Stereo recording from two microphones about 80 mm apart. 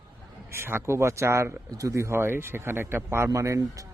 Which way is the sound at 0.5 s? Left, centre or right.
Right.